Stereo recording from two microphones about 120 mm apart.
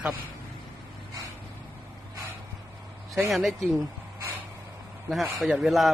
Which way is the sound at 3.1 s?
Centre (ahead or behind).